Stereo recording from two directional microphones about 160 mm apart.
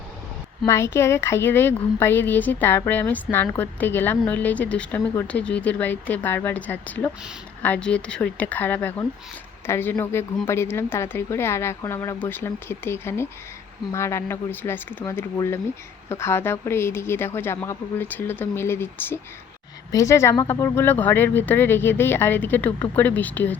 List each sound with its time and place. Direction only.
0.6 s a woman's voice: 15° left (ahead or behind)